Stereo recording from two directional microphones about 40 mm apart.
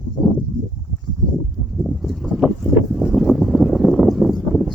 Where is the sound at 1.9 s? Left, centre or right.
Centre.